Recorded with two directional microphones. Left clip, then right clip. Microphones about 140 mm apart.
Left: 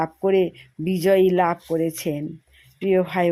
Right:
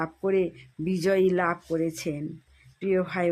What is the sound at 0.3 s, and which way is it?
Speech, 25° left (ahead or behind).